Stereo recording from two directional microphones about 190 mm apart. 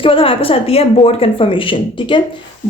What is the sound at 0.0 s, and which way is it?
Speech, 30° left (ahead or behind).